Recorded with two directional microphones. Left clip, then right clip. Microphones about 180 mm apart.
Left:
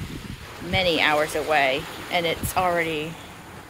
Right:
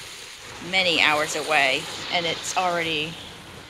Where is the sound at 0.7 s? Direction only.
20° left (ahead or behind).